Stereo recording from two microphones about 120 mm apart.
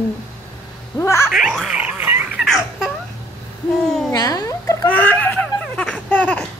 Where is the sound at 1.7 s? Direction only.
10° right (ahead or behind).